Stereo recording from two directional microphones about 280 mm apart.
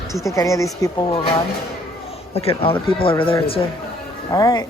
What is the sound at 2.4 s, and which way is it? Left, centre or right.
A woman's voice, centre.